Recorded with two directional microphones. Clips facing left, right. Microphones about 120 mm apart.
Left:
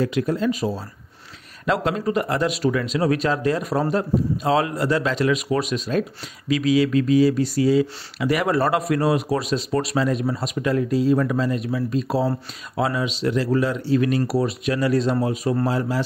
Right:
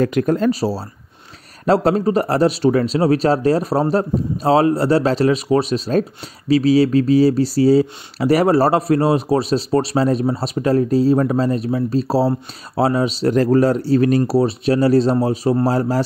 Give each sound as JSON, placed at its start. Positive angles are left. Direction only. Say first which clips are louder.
{"t": 0.0, "sound": "speech", "louder": "right 5 dB", "side_deg": -50}
{"t": 0.5, "sound": "speech", "louder": "right 5 dB", "side_deg": -35}